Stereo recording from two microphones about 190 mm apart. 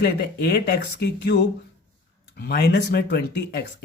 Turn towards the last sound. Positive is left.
turn(degrees=60)  # may be behind; listen again after turning